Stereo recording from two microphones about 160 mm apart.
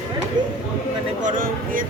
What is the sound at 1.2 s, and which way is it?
Speech, 55° right (ahead or behind).